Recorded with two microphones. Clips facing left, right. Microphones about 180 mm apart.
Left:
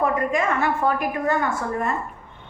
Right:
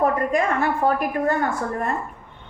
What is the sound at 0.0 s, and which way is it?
A woman's voice, 35° right (ahead or behind).